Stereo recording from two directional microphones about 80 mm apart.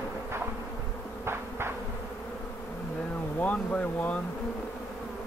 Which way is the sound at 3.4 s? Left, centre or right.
Centre.